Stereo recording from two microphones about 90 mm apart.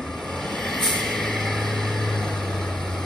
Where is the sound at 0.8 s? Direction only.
5° left (ahead or behind).